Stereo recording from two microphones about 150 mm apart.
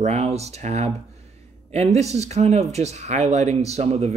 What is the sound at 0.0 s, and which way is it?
Speech, 45° right (ahead or behind).